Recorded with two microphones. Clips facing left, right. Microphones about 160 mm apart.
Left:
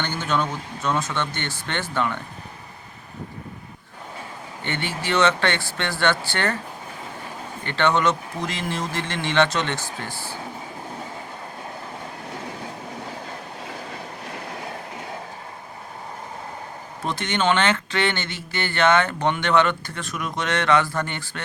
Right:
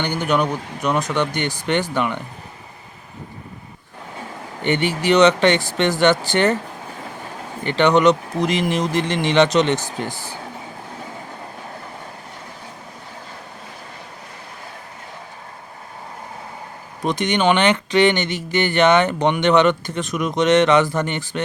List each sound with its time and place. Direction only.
0.0 s speech: 15° right (ahead or behind)
4.6 s speech: 15° right (ahead or behind)
7.6 s speech: 15° right (ahead or behind)
17.0 s speech: 15° right (ahead or behind)